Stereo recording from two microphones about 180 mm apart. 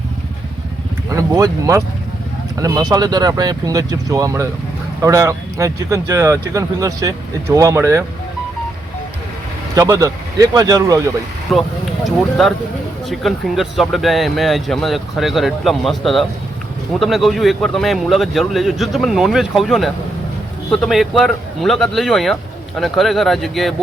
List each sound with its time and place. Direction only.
1.1 s speech: 20° right (ahead or behind)
9.7 s speech: 20° right (ahead or behind)
11.5 s speech: centre (ahead or behind)